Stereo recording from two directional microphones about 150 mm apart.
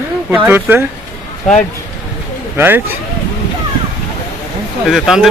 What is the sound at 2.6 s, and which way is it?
Speech, 15° right (ahead or behind).